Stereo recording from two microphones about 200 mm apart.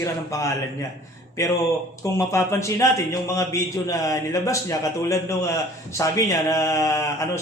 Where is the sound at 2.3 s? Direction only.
15° left (ahead or behind).